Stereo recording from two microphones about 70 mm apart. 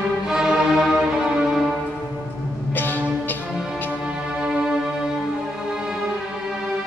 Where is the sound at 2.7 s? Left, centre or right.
Left.